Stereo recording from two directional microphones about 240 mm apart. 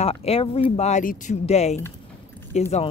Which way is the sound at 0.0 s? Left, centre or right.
Left.